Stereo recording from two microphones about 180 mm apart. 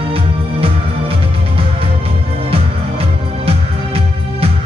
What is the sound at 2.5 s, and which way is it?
Music, 35° right (ahead or behind).